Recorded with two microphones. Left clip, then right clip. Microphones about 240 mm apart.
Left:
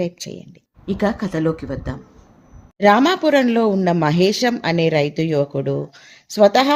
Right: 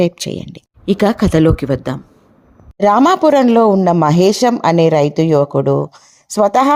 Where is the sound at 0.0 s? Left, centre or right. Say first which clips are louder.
Right 9 dB; right.